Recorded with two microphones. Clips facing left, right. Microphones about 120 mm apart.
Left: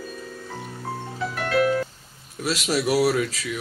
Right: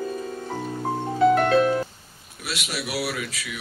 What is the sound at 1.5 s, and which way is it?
Music, 25° right (ahead or behind).